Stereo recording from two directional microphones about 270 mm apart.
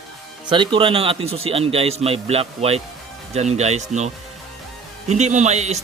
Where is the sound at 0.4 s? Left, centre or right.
Centre.